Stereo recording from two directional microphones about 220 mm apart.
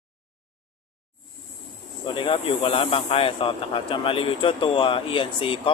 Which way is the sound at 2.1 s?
25° left (ahead or behind).